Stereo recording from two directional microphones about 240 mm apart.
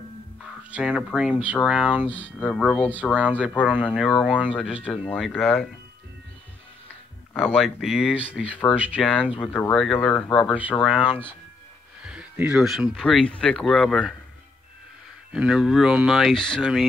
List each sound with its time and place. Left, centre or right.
0.7 s speech: centre
3.2 s speech: centre
7.5 s speech: centre
15.3 s speech: centre